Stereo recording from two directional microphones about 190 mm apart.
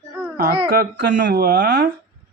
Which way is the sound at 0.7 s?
60° right (ahead or behind).